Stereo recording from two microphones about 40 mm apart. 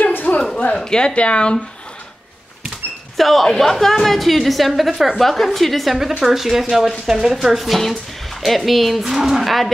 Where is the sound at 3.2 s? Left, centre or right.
Centre.